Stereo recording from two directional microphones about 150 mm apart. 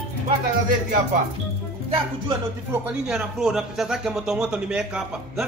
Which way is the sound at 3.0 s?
5° right (ahead or behind).